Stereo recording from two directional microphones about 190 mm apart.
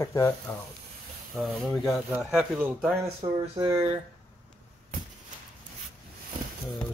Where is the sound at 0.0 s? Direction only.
15° left (ahead or behind).